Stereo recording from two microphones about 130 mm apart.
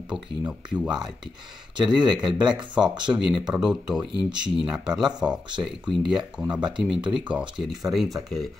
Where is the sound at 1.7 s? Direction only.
35° right (ahead or behind).